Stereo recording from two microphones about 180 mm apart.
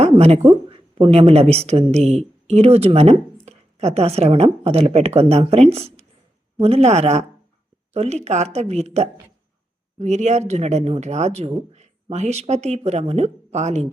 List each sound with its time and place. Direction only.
0.0 s a woman's voice: 35° right (ahead or behind)